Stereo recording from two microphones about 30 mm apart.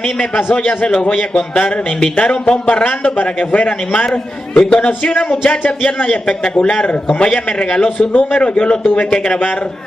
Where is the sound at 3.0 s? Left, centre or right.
Left.